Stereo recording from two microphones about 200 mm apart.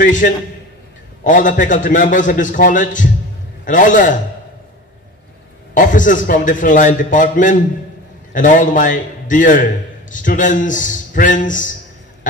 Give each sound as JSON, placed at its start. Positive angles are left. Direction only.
{"t": 0.0, "sound": "a man's voice", "side_deg": 40}
{"t": 5.8, "sound": "a man's voice", "side_deg": 40}